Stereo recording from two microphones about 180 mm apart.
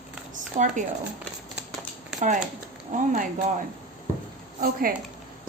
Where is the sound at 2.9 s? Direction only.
45° right (ahead or behind).